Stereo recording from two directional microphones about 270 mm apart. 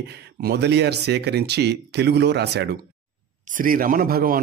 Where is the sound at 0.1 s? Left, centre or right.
Right.